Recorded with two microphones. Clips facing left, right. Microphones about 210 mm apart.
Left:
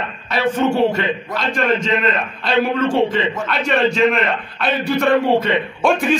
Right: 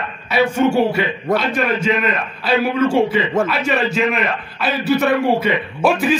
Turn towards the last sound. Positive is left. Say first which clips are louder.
# even
turn(degrees=-5)  # may be behind; listen again after turning